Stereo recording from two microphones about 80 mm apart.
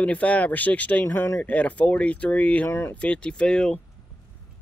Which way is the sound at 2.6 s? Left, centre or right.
Left.